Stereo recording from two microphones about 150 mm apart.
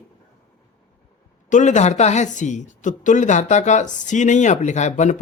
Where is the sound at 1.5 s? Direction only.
55° left (ahead or behind).